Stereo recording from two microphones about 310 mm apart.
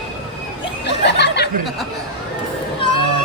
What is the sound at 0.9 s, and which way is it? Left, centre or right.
Chuckle, left.